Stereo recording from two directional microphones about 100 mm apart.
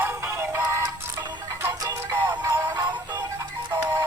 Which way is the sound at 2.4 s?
40° right (ahead or behind).